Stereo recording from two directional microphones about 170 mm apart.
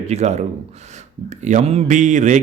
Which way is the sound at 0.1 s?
40° right (ahead or behind).